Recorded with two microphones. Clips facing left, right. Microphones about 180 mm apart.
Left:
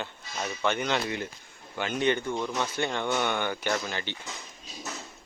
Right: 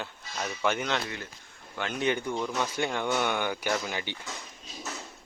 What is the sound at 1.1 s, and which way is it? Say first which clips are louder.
Speech: left 6 dB; 20° left (ahead or behind).